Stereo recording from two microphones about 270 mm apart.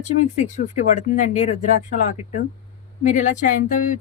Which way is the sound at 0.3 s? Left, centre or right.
Left.